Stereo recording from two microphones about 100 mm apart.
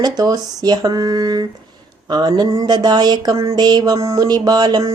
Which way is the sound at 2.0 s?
45° right (ahead or behind).